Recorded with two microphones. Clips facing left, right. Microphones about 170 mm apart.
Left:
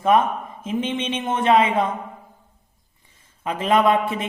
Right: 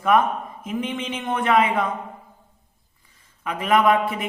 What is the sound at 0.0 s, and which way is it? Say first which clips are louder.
A woman's voice: left 1 dB; 25° left (ahead or behind).